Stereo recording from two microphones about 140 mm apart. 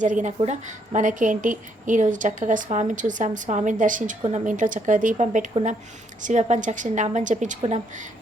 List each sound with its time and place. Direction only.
0.0 s a woman's voice: 60° right (ahead or behind)